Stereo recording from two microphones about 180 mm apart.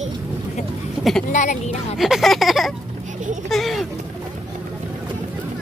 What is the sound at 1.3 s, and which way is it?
Speech, 45° left (ahead or behind).